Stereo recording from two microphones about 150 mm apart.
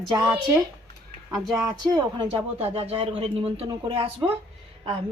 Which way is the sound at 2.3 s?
40° right (ahead or behind).